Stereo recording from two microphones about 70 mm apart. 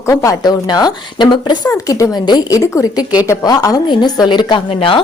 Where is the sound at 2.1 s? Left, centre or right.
Left.